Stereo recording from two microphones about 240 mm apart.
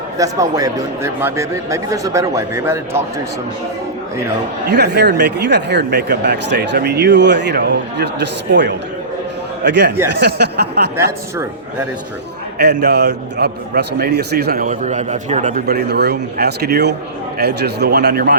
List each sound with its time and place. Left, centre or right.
0.2 s speech: centre
4.7 s a man's voice: right
9.6 s a man's voice: right
12.5 s a man's voice: right